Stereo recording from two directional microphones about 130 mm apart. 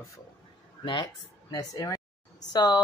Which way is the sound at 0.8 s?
35° left (ahead or behind).